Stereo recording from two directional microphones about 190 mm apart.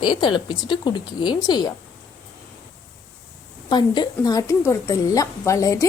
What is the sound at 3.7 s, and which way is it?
A woman's voice, 25° left (ahead or behind).